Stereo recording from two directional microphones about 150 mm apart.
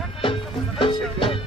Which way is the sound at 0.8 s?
35° left (ahead or behind).